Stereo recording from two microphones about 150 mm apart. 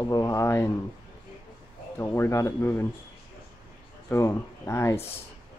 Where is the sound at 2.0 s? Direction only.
15° left (ahead or behind).